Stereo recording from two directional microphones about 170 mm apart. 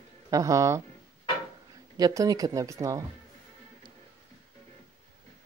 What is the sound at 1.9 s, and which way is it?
Speech, 20° right (ahead or behind).